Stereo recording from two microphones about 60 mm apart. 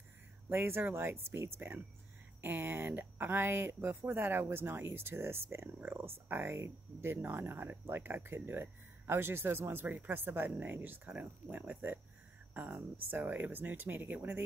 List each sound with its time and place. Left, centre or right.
0.5 s speech: right
5.8 s speech: right
6.0 s speech: right